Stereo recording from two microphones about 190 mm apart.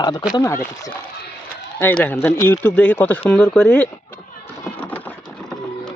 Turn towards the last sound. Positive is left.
turn(degrees=10)  # may be behind; listen again after turning